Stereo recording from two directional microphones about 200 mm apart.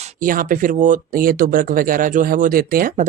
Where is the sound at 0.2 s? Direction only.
45° right (ahead or behind).